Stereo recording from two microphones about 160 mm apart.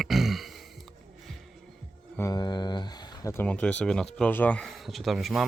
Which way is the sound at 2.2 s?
20° left (ahead or behind).